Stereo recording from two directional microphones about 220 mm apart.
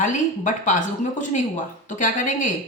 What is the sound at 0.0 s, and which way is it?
Speech, 35° left (ahead or behind).